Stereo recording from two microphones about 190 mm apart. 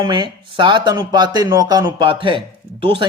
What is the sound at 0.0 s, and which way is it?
Speech, 25° right (ahead or behind).